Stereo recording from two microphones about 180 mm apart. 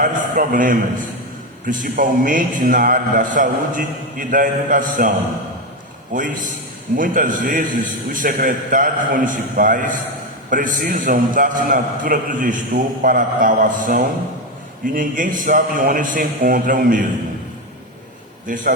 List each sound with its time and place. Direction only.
0.0 s a man's voice: 45° right (ahead or behind)
6.1 s a man's voice: 45° right (ahead or behind)
18.4 s a man's voice: 45° right (ahead or behind)